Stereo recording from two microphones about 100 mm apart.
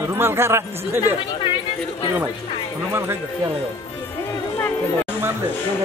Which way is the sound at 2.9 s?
25° right (ahead or behind).